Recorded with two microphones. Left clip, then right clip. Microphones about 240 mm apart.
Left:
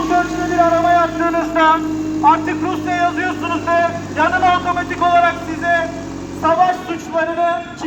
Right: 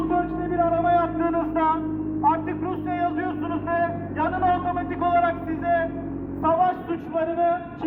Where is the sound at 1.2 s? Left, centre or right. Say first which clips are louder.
Left 8 dB; centre.